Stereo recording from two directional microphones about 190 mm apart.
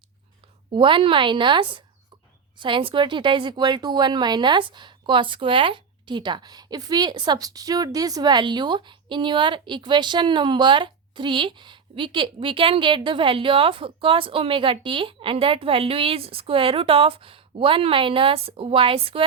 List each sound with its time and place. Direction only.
0.7 s a woman's voice: 25° right (ahead or behind)